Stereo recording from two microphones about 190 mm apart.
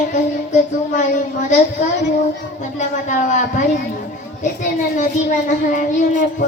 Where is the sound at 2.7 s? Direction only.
40° left (ahead or behind).